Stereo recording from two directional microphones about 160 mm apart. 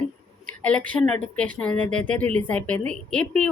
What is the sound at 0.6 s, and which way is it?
A woman's voice, 10° left (ahead or behind).